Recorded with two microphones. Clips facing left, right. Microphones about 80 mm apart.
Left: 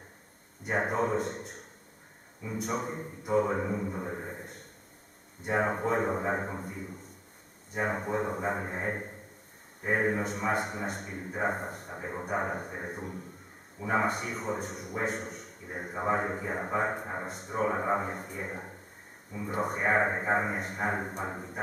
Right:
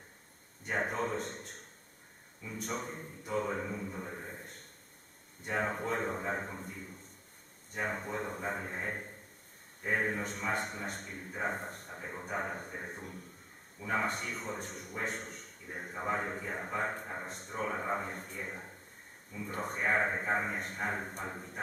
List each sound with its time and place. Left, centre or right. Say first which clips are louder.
0.7 s speech: left 5 dB; centre
5.5 s speech: left 6 dB; left
13.7 s speech: left 5 dB; centre
16.1 s speech: left 6 dB; left
16.5 s speech: left 6 dB; centre
17.6 s speech: left 6 dB; centre